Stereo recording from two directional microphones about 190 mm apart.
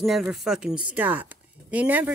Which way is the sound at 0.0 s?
Centre (ahead or behind).